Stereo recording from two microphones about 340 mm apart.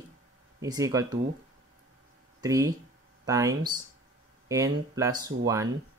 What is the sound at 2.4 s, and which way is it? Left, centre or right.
Speech, centre.